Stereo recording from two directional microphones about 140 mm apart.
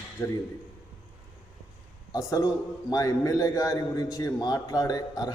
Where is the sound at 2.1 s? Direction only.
25° left (ahead or behind).